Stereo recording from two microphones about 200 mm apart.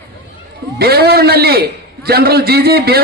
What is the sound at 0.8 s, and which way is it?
A man's voice, 50° right (ahead or behind).